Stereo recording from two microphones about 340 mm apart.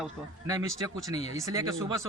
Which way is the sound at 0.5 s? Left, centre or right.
Centre.